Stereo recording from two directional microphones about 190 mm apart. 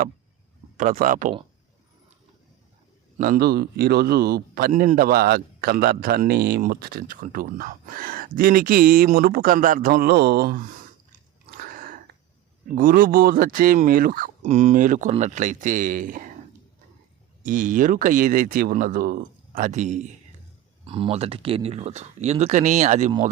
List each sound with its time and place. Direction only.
0.8 s a man's voice: 45° right (ahead or behind)
3.2 s a man's voice: 50° right (ahead or behind)
4.7 s a man's voice: 45° right (ahead or behind)
11.6 s a sound: 45° right (ahead or behind)
12.6 s a man's voice: 45° right (ahead or behind)
17.4 s a man's voice: 45° right (ahead or behind)
20.8 s speech: 30° right (ahead or behind)